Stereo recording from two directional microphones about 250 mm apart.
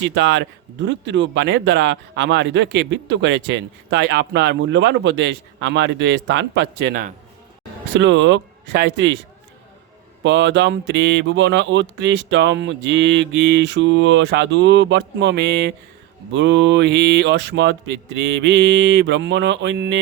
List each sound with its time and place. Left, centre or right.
0.0 s speech: right
10.2 s speech: right